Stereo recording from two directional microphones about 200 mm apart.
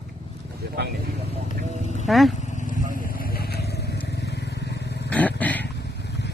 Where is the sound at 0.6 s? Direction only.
55° right (ahead or behind).